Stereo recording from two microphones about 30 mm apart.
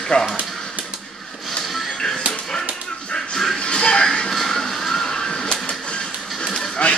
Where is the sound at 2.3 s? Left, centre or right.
Centre.